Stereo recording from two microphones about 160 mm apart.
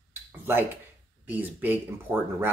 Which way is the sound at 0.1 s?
15° right (ahead or behind).